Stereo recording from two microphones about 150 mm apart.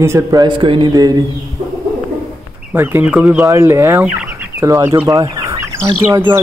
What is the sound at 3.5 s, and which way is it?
Speech, 15° right (ahead or behind).